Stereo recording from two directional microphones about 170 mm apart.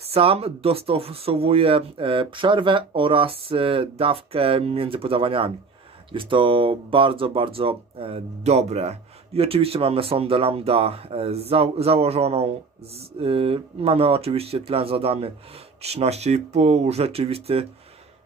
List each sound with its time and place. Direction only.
0.0 s speech: 35° right (ahead or behind)